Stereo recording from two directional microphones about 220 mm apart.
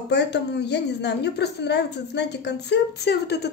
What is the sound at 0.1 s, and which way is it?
A woman's voice, 50° left (ahead or behind).